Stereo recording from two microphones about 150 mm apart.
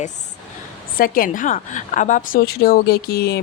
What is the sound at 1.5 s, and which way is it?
Speech, 55° left (ahead or behind).